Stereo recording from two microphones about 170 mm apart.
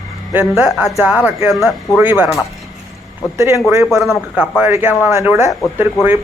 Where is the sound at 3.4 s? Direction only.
15° right (ahead or behind).